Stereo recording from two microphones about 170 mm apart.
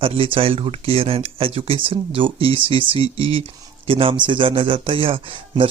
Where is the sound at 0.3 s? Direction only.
35° right (ahead or behind).